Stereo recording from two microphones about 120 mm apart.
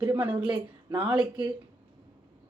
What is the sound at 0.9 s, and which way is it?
Speech, 10° right (ahead or behind).